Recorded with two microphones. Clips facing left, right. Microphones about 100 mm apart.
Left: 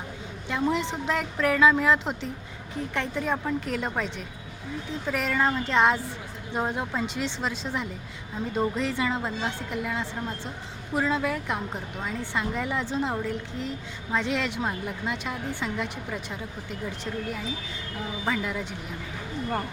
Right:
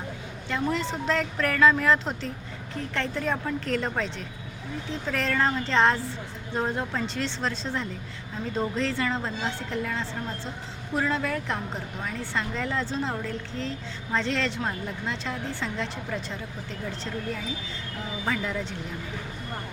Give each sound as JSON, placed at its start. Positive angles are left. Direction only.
{"t": 0.4, "sound": "a woman's voice", "side_deg": 15}
{"t": 18.3, "sound": "a woman's voice", "side_deg": 10}